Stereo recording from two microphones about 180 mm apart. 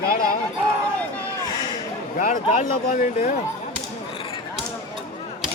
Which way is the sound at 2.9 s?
50° left (ahead or behind).